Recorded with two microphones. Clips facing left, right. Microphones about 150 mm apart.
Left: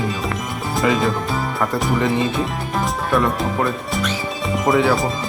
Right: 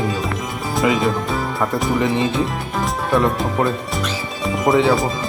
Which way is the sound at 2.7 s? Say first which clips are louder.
Left 1 dB; centre (ahead or behind).